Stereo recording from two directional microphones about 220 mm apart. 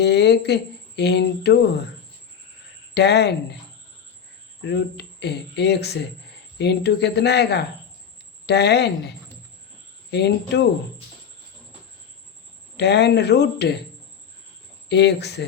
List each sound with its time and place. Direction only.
0.0 s speech: 50° left (ahead or behind)
2.9 s speech: 50° left (ahead or behind)
4.6 s speech: 50° left (ahead or behind)
12.7 s speech: 50° left (ahead or behind)
14.8 s speech: 50° left (ahead or behind)